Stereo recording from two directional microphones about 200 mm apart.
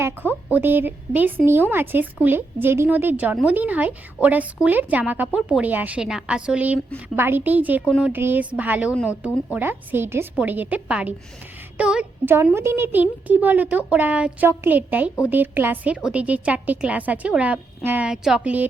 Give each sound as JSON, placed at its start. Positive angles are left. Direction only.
{"t": 0.0, "sound": "a woman's voice", "side_deg": -10}